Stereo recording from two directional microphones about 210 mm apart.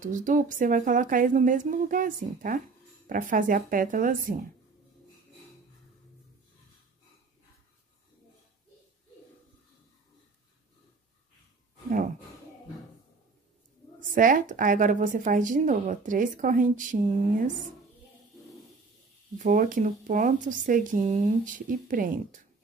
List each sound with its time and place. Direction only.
0.0 s a woman's voice: 40° right (ahead or behind)
13.9 s a woman's voice: 40° right (ahead or behind)
19.3 s a woman's voice: 40° right (ahead or behind)